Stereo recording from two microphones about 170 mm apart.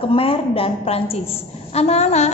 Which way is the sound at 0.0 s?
35° left (ahead or behind).